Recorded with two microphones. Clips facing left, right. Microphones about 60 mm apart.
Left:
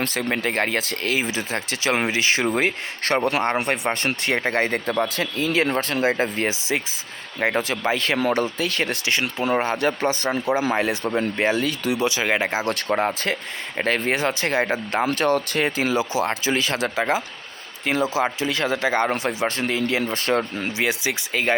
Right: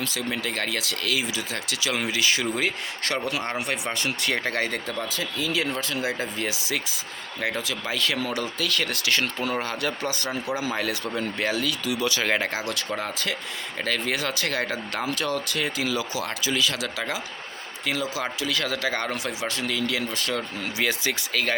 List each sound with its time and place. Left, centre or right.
0.0 s speech: left
12.0 s speech: centre
12.6 s speech: left
15.0 s speech: left
20.7 s speech: centre